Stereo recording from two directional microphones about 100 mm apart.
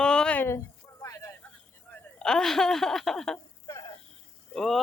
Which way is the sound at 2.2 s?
5° left (ahead or behind).